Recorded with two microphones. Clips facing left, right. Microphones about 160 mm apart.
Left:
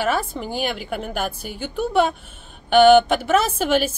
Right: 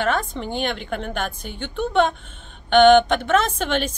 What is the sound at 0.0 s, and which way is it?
A woman's voice, 5° left (ahead or behind).